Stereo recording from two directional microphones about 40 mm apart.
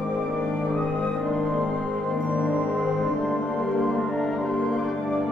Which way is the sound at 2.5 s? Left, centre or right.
Right.